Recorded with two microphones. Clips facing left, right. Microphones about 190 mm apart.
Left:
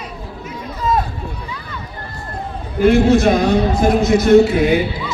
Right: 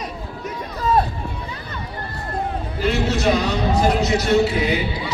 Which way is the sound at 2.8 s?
50° left (ahead or behind).